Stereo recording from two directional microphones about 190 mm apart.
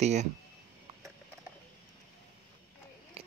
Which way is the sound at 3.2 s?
30° right (ahead or behind).